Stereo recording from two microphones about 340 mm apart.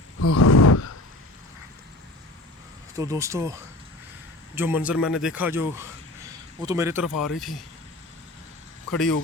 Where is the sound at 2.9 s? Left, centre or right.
Centre.